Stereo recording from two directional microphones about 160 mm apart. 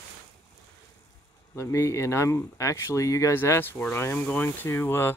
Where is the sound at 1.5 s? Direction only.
15° left (ahead or behind).